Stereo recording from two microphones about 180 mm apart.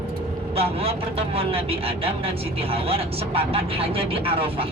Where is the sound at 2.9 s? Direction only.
30° right (ahead or behind).